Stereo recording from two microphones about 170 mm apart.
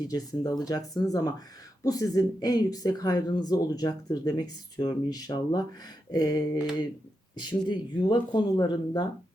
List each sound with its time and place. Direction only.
0.0 s speech: 20° left (ahead or behind)